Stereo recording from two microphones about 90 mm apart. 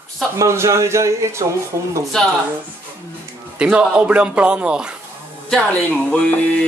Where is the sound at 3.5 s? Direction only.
10° right (ahead or behind).